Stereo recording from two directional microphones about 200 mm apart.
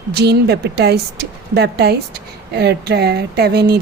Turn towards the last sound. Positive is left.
turn(degrees=-55)  # may be behind; listen again after turning